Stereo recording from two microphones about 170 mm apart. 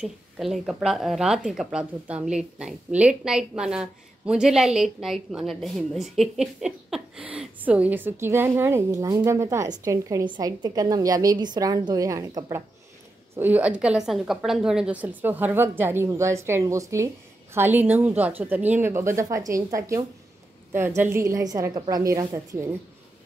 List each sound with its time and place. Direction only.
0.0 s a woman's voice: centre (ahead or behind); by 12.6 s 20° right (ahead or behind)
13.4 s a woman's voice: 10° right (ahead or behind)